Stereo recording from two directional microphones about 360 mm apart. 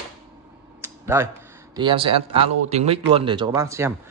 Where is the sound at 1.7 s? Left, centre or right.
Centre.